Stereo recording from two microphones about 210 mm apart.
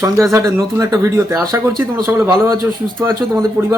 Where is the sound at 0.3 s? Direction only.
15° right (ahead or behind).